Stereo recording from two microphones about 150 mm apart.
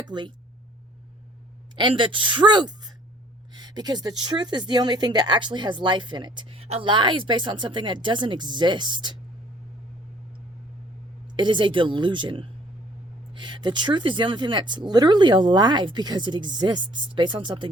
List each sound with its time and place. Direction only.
0.1 s speech: 30° right (ahead or behind)
1.7 s speech: 30° right (ahead or behind)
11.3 s speech: 30° right (ahead or behind)